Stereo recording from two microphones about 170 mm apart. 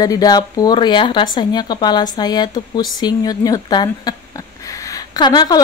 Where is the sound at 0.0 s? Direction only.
20° left (ahead or behind).